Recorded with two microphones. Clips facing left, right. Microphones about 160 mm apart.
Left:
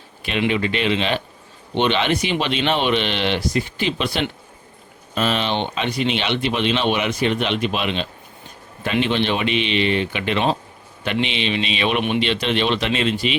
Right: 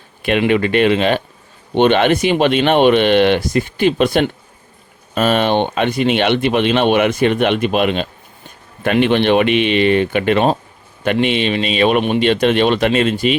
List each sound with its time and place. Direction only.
0.2 s speech: 55° right (ahead or behind)